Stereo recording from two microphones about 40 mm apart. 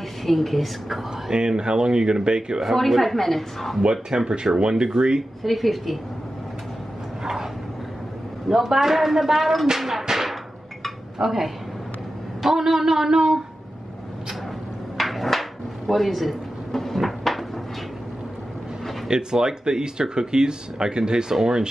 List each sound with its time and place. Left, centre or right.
0.2 s a woman's voice: centre
1.3 s speech: centre
2.6 s a woman's voice: centre
3.8 s speech: centre
5.4 s a woman's voice: centre
8.5 s speech: centre
15.0 s a sound: centre
15.9 s drawer open or close: centre
19.0 s speech: centre